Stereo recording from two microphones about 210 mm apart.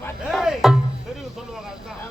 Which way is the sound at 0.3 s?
Centre (ahead or behind).